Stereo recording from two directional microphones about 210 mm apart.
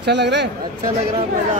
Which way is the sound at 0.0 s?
55° right (ahead or behind).